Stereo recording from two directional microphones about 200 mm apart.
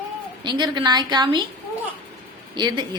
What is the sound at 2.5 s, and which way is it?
Speech, 20° right (ahead or behind).